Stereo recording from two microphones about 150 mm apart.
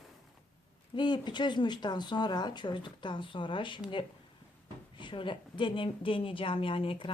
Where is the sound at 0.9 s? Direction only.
30° left (ahead or behind).